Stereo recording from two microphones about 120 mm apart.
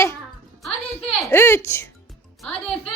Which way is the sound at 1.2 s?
20° left (ahead or behind).